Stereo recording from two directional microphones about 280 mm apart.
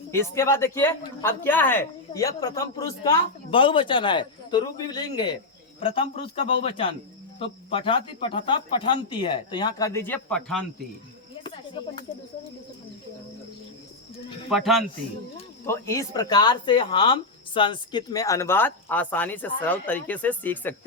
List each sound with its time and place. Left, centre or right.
0.1 s speech: centre
11.4 s snake: centre
14.5 s speech: centre